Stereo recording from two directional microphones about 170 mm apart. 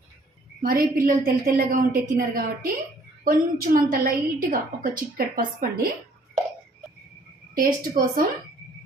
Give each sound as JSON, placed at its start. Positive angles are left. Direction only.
{"t": 0.6, "sound": "a woman's voice", "side_deg": -55}
{"t": 7.5, "sound": "a woman's voice", "side_deg": -55}